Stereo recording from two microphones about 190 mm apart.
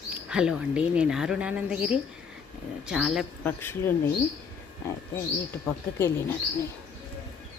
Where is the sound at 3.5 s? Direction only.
10° left (ahead or behind).